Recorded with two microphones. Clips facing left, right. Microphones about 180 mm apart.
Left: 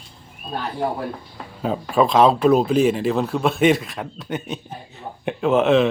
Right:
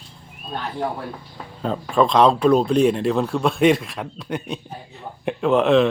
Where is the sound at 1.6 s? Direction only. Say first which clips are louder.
Even; 5° left (ahead or behind).